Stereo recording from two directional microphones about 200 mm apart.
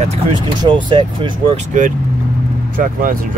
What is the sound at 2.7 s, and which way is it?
Speech, 45° right (ahead or behind).